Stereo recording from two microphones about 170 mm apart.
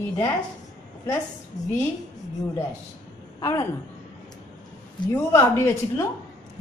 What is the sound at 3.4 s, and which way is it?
Speech, 15° left (ahead or behind).